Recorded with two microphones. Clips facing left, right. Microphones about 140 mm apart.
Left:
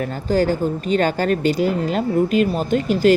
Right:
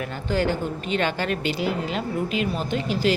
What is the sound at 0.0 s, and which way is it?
A woman's voice, 40° left (ahead or behind).